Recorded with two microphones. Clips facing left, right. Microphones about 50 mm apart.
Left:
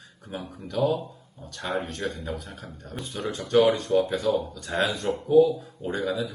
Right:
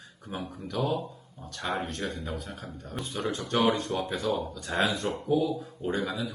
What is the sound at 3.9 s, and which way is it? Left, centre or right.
Speech, right.